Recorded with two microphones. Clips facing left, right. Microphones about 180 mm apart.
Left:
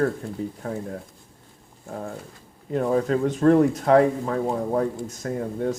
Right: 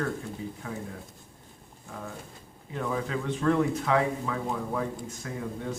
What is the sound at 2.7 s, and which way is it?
Speech, 40° left (ahead or behind).